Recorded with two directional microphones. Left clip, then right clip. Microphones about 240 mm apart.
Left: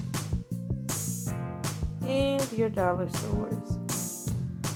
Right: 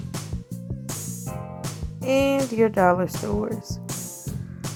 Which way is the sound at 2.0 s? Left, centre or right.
Right.